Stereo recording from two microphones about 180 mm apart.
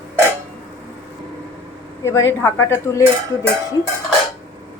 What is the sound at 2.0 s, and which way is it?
Speech, 15° left (ahead or behind).